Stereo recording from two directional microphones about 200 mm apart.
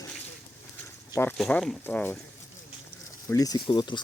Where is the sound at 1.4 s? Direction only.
5° left (ahead or behind).